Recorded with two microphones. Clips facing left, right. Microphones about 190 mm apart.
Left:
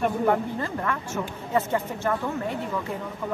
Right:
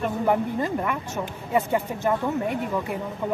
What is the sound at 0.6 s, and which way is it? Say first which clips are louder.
Speech: right 3 dB; 15° right (ahead or behind).